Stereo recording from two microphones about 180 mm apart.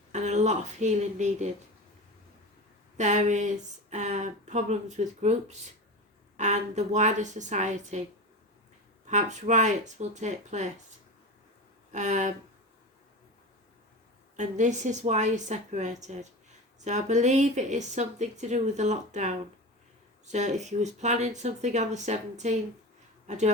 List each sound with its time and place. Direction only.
0.1 s speech: 40° right (ahead or behind)
3.0 s speech: 40° right (ahead or behind)
9.0 s speech: 40° right (ahead or behind)
11.9 s speech: 40° right (ahead or behind)
14.3 s speech: 40° right (ahead or behind)